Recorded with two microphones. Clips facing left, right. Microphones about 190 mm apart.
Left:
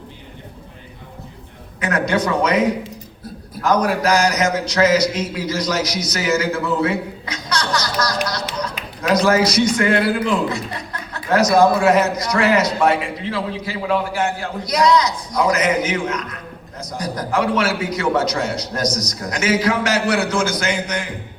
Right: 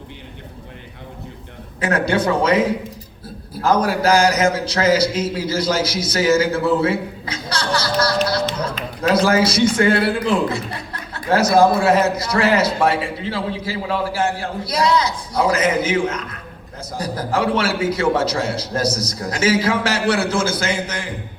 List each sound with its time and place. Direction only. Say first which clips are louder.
1.8 s a man's voice: right 1 dB; 30° right (ahead or behind)
3.6 s a man's voice: even; 30° right (ahead or behind)
7.5 s music: right 1 dB; 30° right (ahead or behind)
8.8 s a sound: right 5 dB; 10° left (ahead or behind)
9.2 s a man's voice: left 2 dB; 30° right (ahead or behind)